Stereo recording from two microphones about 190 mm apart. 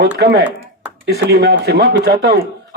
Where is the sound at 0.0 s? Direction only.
55° right (ahead or behind).